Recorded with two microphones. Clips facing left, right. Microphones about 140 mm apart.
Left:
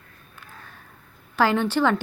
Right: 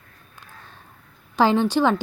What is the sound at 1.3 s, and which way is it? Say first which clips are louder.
Speech: right 3 dB; 15° right (ahead or behind).